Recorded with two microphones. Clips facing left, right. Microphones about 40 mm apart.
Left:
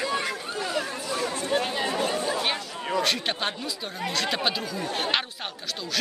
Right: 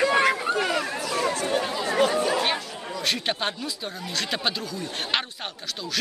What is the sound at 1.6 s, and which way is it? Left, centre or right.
Chatter, left.